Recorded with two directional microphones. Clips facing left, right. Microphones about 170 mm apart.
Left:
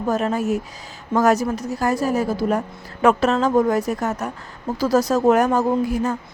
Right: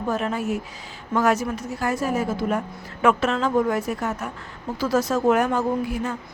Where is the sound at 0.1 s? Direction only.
40° left (ahead or behind).